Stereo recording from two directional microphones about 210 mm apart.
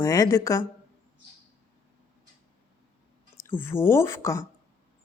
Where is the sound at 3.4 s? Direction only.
10° left (ahead or behind).